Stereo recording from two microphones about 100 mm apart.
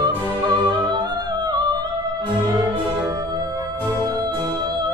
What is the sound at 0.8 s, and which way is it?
Music, 45° right (ahead or behind).